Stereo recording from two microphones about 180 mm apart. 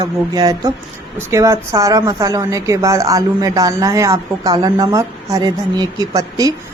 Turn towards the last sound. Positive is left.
turn(degrees=-20)  # may be behind; listen again after turning